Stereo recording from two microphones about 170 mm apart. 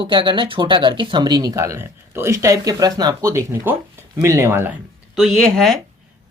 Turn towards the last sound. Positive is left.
turn(degrees=0)  # may be behind; listen again after turning